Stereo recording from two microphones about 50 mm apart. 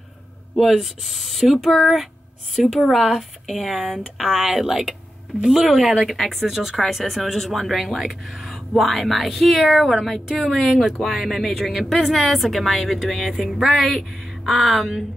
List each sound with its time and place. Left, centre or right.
0.6 s speech: centre